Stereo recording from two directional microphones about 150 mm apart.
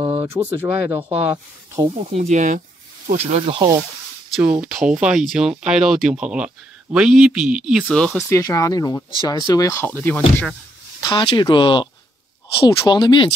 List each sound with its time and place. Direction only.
0.2 s speech: 15° right (ahead or behind)
2.0 s speech: 45° right (ahead or behind)
3.5 s speech: 25° right (ahead or behind)
4.4 s speech: 5° right (ahead or behind)
7.9 s speech: 5° left (ahead or behind)
8.2 s speech: 20° left (ahead or behind)
11.0 s speech: 30° left (ahead or behind)